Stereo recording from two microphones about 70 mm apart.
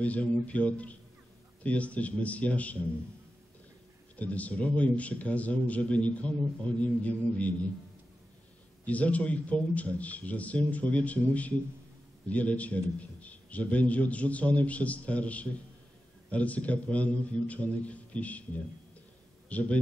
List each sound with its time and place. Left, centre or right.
0.0 s a man's voice: centre
4.2 s a man's voice: left
8.8 s a man's voice: centre